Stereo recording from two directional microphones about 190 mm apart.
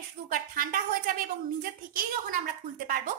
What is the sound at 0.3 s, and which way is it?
A woman's voice, 50° right (ahead or behind).